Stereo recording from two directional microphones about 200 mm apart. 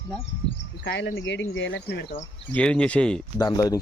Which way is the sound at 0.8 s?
65° left (ahead or behind).